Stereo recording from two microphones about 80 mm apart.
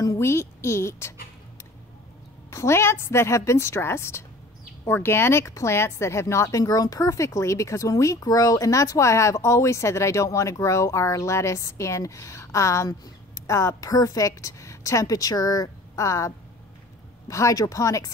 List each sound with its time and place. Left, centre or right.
0.0 s a woman's voice: left
2.5 s speech: left
6.6 s a woman's voice: left